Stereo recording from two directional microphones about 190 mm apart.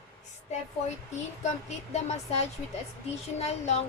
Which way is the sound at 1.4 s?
35° left (ahead or behind).